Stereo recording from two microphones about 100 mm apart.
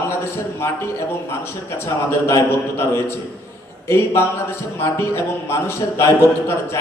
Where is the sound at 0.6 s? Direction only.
25° left (ahead or behind).